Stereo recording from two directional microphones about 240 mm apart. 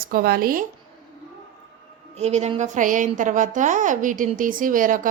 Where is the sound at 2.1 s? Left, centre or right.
Right.